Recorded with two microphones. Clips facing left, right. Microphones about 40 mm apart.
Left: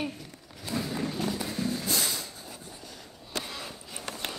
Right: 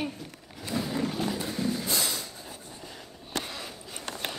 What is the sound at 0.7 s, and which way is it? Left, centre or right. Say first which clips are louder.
Roaring cats: right 1 dB; right.